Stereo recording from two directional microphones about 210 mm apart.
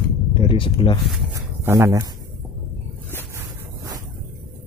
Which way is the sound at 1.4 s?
15° right (ahead or behind).